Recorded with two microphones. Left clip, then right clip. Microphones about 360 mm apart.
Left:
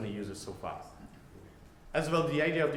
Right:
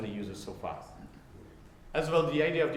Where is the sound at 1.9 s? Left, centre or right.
Left.